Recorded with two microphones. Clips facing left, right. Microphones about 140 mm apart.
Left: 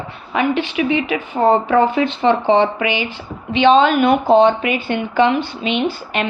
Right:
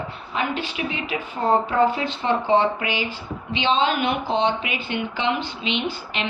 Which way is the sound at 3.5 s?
60° left (ahead or behind).